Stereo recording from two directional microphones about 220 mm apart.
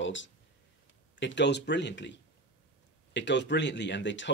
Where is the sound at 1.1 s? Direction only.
55° left (ahead or behind).